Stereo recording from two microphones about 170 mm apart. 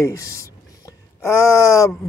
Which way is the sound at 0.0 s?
20° left (ahead or behind).